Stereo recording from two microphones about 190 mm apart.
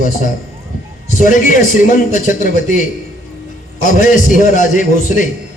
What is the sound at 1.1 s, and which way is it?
A man's voice, 45° left (ahead or behind).